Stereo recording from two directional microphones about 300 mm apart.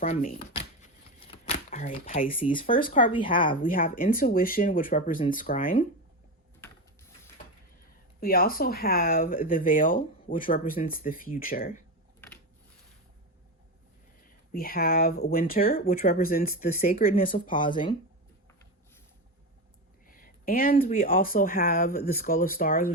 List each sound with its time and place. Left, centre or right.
0.0 s speech: left
0.6 s shuffling cards: left
3.2 s speech: left
8.2 s speech: left
14.5 s speech: left
17.5 s speech: centre
20.1 s speech: left